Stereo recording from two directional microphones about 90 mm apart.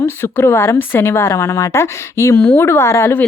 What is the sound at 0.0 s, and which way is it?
Speech, 25° left (ahead or behind).